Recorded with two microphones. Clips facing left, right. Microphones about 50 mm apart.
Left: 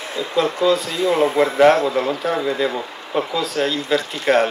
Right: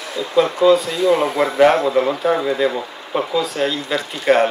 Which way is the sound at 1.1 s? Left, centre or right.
Left.